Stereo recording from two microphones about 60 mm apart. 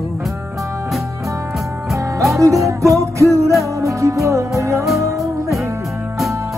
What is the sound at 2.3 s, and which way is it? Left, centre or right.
Music, right.